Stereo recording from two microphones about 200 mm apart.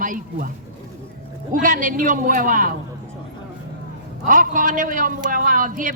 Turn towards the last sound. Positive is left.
turn(degrees=-40)  # may be behind; listen again after turning